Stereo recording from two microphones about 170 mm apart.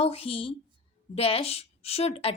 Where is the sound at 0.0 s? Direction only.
35° left (ahead or behind).